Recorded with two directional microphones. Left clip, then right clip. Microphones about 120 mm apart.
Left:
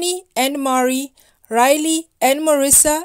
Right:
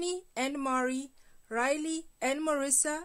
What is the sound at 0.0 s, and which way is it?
A woman's voice, 30° left (ahead or behind).